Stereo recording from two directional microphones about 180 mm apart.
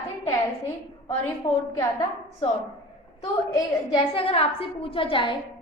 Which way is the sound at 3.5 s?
30° left (ahead or behind).